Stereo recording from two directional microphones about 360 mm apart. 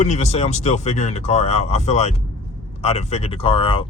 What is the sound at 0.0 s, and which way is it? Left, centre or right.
Speech, centre.